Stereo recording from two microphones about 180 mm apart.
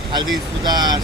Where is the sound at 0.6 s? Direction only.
25° right (ahead or behind).